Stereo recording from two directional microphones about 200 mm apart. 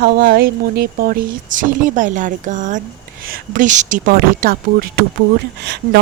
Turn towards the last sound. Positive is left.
turn(degrees=-55)  # may be behind; listen again after turning